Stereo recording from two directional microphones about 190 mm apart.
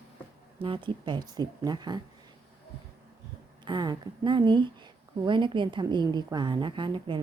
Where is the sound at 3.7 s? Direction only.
20° right (ahead or behind).